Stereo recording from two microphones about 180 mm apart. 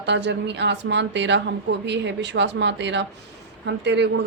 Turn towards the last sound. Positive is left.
turn(degrees=-75)  # may be behind; listen again after turning